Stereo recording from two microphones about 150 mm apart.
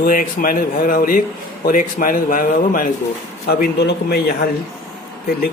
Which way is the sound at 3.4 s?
90° left.